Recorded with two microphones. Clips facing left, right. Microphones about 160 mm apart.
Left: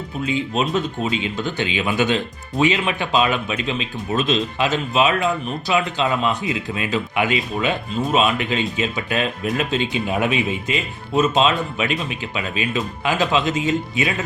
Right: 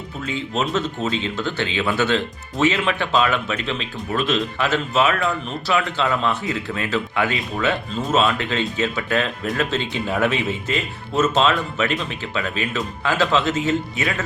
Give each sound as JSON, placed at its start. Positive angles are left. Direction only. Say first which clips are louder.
{"t": 0.3, "sound": "speech", "louder": "left 2 dB", "side_deg": 15}